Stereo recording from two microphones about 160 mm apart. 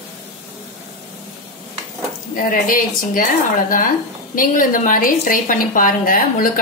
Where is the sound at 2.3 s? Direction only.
55° left (ahead or behind).